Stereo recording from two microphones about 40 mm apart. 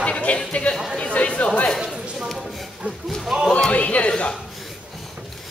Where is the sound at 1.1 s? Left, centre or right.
Left.